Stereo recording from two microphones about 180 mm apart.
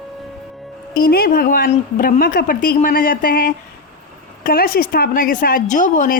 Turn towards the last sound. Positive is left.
turn(degrees=50)  # may be behind; listen again after turning